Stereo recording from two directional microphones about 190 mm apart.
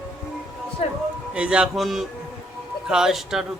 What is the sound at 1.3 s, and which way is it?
Speech, 5° right (ahead or behind).